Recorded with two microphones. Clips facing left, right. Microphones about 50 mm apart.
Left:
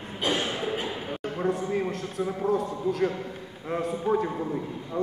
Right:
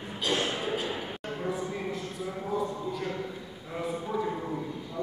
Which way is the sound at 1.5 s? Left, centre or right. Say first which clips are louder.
Left 6 dB; left.